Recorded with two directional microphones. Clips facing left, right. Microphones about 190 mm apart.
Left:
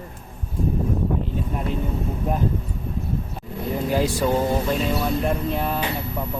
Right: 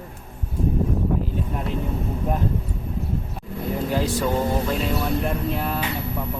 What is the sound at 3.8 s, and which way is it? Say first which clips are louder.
Speech: left 3 dB; 10° left (ahead or behind).